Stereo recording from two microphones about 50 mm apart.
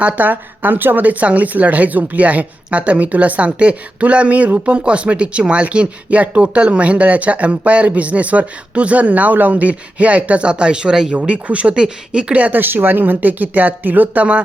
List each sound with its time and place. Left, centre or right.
0.0 s speech: right